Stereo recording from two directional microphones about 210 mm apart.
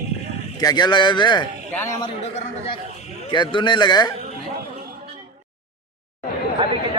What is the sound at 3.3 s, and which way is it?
Speech, 20° left (ahead or behind).